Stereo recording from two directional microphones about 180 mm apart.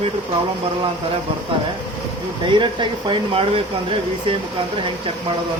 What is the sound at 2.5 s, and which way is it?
Speech, 25° right (ahead or behind).